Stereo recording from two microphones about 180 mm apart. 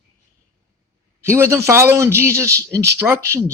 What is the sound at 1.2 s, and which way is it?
Speech, 15° right (ahead or behind).